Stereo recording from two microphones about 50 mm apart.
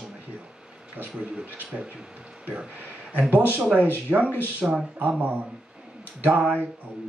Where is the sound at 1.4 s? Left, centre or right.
Right.